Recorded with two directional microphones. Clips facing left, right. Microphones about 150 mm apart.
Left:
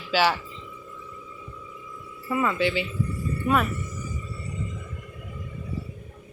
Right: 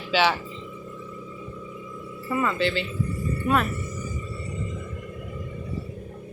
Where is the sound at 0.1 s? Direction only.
10° left (ahead or behind).